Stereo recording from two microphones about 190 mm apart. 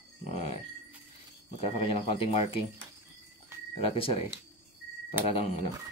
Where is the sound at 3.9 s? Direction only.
30° left (ahead or behind).